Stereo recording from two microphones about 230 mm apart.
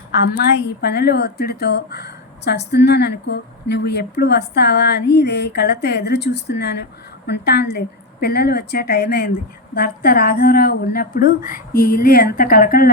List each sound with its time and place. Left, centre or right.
0.8 s a woman's voice: left